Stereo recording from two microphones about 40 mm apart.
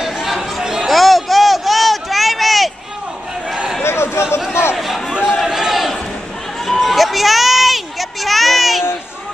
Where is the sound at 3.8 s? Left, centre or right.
Left.